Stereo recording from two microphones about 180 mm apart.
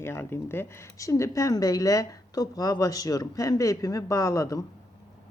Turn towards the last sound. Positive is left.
turn(degrees=15)  # may be behind; listen again after turning